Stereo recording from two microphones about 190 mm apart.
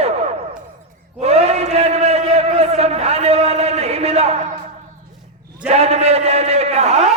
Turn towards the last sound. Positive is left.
turn(degrees=-35)  # may be behind; listen again after turning